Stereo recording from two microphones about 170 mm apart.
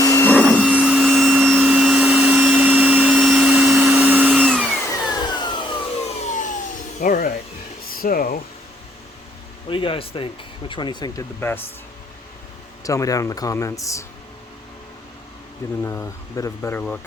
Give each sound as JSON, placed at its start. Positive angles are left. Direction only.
{"t": 0.0, "sound": "vacuum cleaner", "side_deg": 20}
{"t": 0.3, "sound": "vacuum cleaner", "side_deg": 5}
{"t": 0.7, "sound": "vacuum cleaner", "side_deg": -5}
{"t": 4.9, "sound": "vacuum cleaner", "side_deg": 25}
{"t": 6.2, "sound": "a sound", "side_deg": 50}
{"t": 7.0, "sound": "music", "side_deg": 55}
{"t": 8.0, "sound": "a sound", "side_deg": 60}
{"t": 9.6, "sound": "a sound", "side_deg": 30}
{"t": 10.7, "sound": "speech", "side_deg": 25}
{"t": 12.8, "sound": "speech", "side_deg": 20}
{"t": 15.8, "sound": "speech", "side_deg": 15}